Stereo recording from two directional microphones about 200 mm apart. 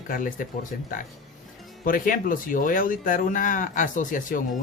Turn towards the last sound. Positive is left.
turn(degrees=40)  # may be behind; listen again after turning